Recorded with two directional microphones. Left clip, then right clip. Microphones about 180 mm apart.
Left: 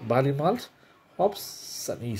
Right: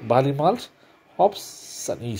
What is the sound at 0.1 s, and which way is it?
Speech, 5° left (ahead or behind).